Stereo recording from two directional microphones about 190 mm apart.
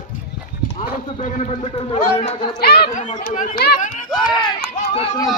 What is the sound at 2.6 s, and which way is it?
Speech, 55° left (ahead or behind).